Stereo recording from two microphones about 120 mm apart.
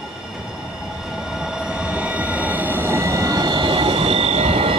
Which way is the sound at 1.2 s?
5° right (ahead or behind).